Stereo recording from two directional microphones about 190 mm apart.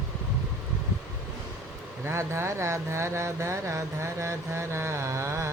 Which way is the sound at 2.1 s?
15° right (ahead or behind).